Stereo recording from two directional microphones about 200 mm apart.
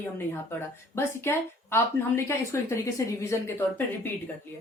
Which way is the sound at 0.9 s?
10° left (ahead or behind).